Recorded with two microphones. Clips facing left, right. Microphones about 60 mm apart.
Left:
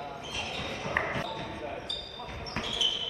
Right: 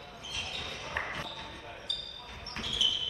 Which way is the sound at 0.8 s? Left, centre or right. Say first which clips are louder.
Left 6 dB; left.